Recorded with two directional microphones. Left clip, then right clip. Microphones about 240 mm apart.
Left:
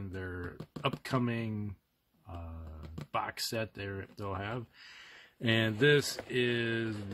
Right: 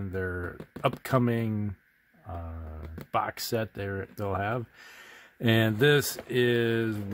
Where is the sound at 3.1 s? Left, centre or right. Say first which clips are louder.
Right 6 dB; right.